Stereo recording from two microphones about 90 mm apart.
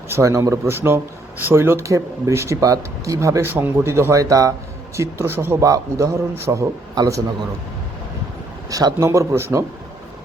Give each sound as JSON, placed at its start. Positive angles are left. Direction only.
{"t": 0.1, "sound": "a man's voice", "side_deg": -35}
{"t": 2.6, "sound": "a man's voice", "side_deg": -40}
{"t": 4.9, "sound": "speech", "side_deg": -30}
{"t": 5.5, "sound": "a man's voice", "side_deg": -40}
{"t": 6.9, "sound": "a man's voice", "side_deg": -45}
{"t": 8.7, "sound": "a man's voice", "side_deg": -35}